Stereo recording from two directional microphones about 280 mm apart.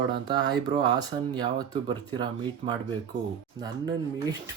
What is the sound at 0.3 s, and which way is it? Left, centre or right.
A man's voice, centre.